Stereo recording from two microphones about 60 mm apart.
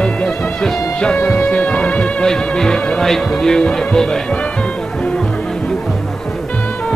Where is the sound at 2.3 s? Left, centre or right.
Centre.